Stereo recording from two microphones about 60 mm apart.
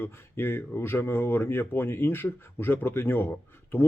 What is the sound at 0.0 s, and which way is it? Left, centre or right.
Speech, left.